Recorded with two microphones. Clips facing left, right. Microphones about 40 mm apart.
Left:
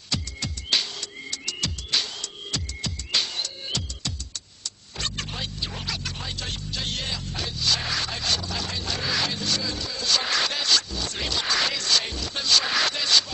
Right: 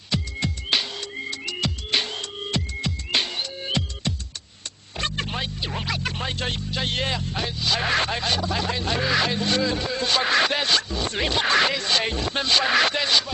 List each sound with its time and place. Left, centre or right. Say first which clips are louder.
0.1 s music: right 4 dB; centre
7.8 s a sound: right 6 dB; right
11.7 s music: right 2 dB; right
12.0 s speech: right 6 dB; right